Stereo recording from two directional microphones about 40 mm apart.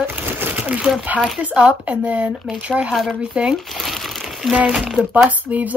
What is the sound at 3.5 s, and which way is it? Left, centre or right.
Crumpling, centre.